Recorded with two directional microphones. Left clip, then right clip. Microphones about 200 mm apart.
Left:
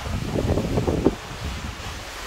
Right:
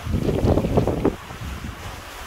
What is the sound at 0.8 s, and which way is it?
Wind noise, centre (ahead or behind).